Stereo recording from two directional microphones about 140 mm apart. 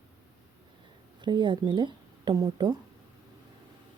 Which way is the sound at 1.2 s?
35° right (ahead or behind).